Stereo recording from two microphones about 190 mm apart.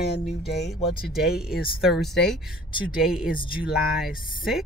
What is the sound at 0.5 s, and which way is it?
Speech, 60° left (ahead or behind).